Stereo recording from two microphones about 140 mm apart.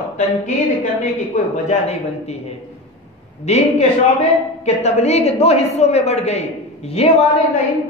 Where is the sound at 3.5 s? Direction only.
50° left (ahead or behind).